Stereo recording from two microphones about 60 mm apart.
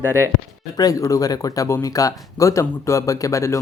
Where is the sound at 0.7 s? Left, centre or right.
Left.